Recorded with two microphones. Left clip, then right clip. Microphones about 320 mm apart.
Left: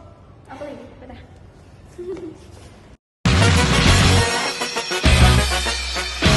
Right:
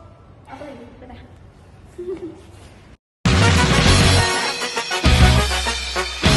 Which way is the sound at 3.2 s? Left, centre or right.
Centre.